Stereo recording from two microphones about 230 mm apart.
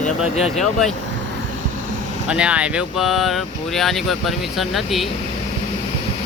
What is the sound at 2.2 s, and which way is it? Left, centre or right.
Speech, centre.